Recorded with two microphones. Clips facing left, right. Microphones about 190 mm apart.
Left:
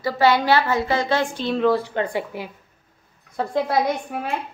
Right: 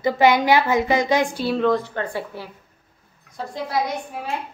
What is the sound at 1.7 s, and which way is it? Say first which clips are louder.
Speech: left 1 dB; 10° left (ahead or behind).